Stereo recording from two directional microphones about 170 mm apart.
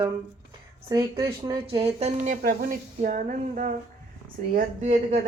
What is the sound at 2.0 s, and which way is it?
Speech, 45° right (ahead or behind).